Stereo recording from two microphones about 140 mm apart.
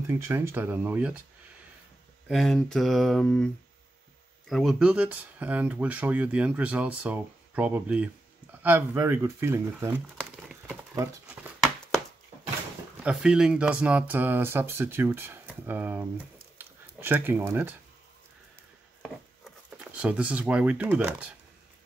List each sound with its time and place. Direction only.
0.3 s speech: 15° right (ahead or behind)
2.2 s speech: centre (ahead or behind)
4.5 s speech: centre (ahead or behind); by 10.0 s 15° right (ahead or behind)
13.0 s speech: 5° right (ahead or behind)
16.5 s a sound: 15° right (ahead or behind)
20.0 s speech: 10° right (ahead or behind)